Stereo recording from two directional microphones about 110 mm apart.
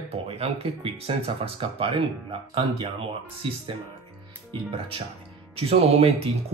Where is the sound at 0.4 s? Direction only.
65° right (ahead or behind).